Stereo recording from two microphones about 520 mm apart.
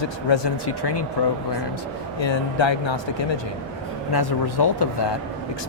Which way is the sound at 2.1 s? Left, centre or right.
Left.